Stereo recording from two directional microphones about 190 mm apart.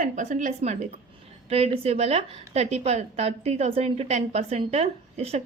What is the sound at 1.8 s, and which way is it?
A woman's voice, 35° right (ahead or behind).